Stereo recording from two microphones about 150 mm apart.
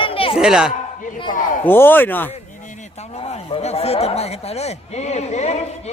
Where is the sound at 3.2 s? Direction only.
45° left (ahead or behind).